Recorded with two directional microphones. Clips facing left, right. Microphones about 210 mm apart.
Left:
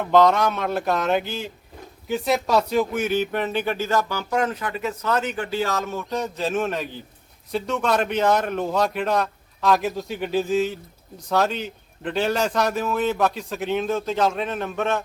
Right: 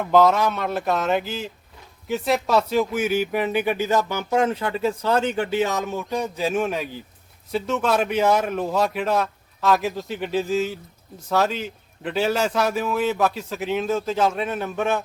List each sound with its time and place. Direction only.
0.0 s a man's voice: 5° right (ahead or behind)